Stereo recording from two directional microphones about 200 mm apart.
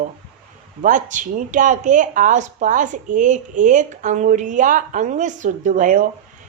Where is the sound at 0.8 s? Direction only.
40° right (ahead or behind).